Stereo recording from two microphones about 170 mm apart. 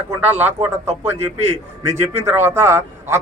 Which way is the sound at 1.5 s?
40° right (ahead or behind).